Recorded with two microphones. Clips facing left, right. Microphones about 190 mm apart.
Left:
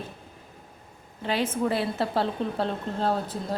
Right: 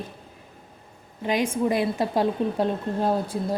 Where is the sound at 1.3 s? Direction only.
15° right (ahead or behind).